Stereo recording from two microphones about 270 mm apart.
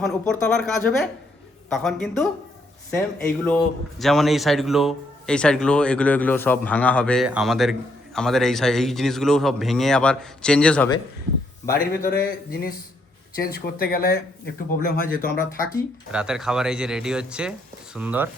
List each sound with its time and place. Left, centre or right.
0.0 s a man's voice: centre
3.4 s a man's voice: centre
11.7 s a man's voice: left
16.1 s a man's voice: centre